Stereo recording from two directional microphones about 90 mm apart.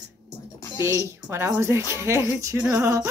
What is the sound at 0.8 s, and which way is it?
Speech, 30° right (ahead or behind).